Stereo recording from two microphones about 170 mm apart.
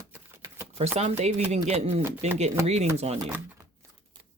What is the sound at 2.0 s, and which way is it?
Speech, 15° right (ahead or behind).